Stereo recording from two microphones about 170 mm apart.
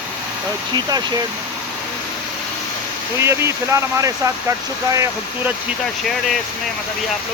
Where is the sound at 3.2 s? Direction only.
15° right (ahead or behind).